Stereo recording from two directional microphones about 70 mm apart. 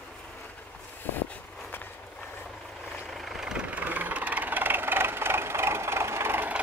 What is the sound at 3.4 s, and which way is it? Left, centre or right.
Vehicle, centre.